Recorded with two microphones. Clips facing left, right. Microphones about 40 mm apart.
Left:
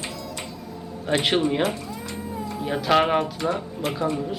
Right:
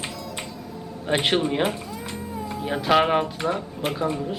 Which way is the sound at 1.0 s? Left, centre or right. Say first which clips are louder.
Even; centre.